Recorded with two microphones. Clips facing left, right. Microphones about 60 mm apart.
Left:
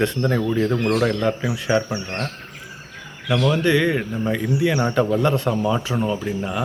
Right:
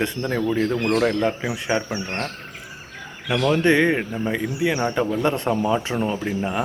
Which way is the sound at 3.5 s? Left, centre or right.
Right.